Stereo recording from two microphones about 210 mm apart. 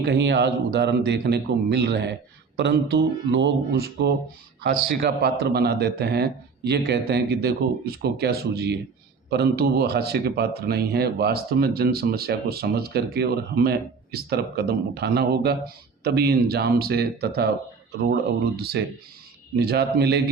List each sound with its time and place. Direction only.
0.0 s speech: 55° right (ahead or behind)